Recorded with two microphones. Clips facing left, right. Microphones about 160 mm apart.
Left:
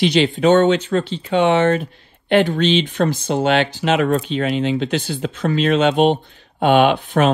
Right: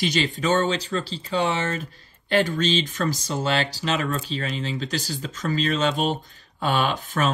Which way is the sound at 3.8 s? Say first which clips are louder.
Left 8 dB; 65° left (ahead or behind).